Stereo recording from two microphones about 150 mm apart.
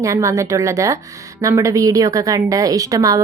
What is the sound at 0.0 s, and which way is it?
A woman's voice, 20° right (ahead or behind).